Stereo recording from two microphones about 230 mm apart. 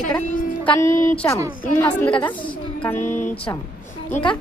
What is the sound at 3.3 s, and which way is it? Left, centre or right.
Speech, centre.